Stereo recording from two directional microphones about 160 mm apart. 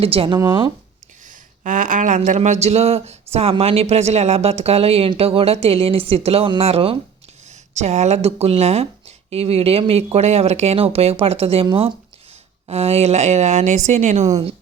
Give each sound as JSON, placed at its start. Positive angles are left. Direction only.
{"t": 0.0, "sound": "speech", "side_deg": -35}
{"t": 1.6, "sound": "speech", "side_deg": -55}